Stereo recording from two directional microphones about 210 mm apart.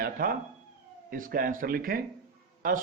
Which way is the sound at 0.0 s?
45° right (ahead or behind).